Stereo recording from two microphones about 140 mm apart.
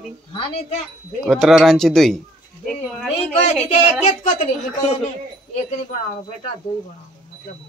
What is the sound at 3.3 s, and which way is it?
A woman's voice, 55° left (ahead or behind).